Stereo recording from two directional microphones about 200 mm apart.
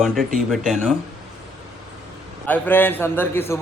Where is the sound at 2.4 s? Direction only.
10° left (ahead or behind).